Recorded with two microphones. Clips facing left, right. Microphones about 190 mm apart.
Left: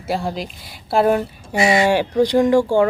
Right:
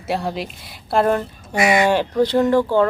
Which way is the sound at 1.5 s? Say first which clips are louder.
Even; 25° left (ahead or behind).